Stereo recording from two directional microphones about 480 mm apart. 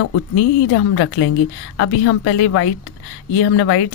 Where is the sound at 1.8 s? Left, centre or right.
Left.